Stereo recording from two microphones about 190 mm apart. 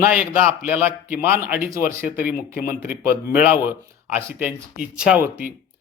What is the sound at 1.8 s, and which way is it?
Speech, 50° left (ahead or behind).